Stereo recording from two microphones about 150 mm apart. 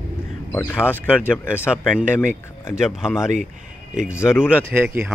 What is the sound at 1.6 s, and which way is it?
Speech, 5° right (ahead or behind).